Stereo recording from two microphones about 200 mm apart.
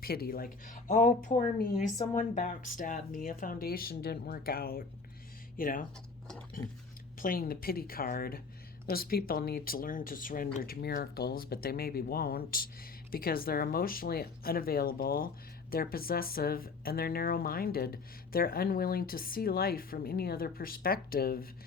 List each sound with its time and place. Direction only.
0.0 s speech: 50° left (ahead or behind)
7.2 s speech: 45° left (ahead or behind)